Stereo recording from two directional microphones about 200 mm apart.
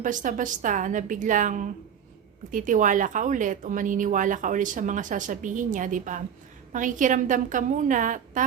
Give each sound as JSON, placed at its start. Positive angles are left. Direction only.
{"t": 0.0, "sound": "speech", "side_deg": -40}